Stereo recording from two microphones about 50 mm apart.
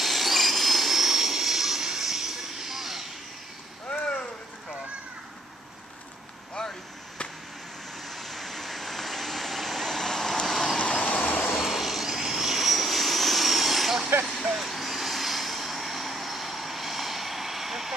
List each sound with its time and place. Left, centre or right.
0.0 s jet engine: centre
6.6 s a sound: centre
8.0 s vehicle: centre
10.8 s vehicle: left
11.5 s vehicle: centre